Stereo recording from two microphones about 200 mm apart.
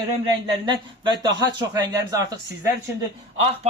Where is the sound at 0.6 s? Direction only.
25° right (ahead or behind).